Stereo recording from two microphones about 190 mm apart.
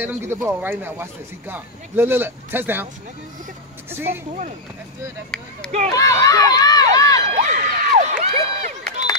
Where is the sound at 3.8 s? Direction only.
10° right (ahead or behind).